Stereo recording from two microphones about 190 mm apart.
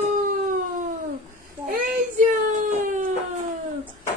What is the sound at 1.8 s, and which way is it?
Child singing, 45° right (ahead or behind).